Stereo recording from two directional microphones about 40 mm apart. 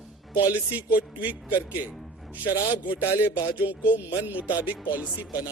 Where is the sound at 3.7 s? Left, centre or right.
Right.